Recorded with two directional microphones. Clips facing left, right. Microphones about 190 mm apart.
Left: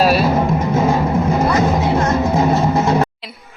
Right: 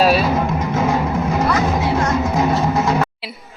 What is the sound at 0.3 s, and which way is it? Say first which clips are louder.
Music: left 3 dB; 30° left (ahead or behind).